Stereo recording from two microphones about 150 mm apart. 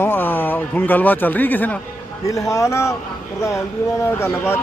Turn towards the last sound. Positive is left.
turn(degrees=15)  # may be behind; listen again after turning